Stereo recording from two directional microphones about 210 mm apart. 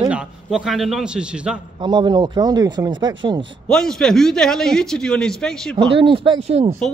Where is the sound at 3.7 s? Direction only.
Centre (ahead or behind).